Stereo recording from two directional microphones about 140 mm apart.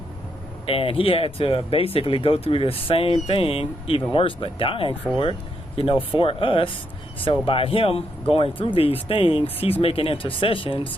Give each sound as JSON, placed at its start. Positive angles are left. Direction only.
{"t": 0.7, "sound": "speech", "side_deg": 40}